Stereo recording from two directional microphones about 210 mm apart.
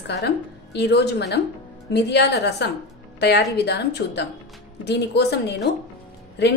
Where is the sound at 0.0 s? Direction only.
55° left (ahead or behind).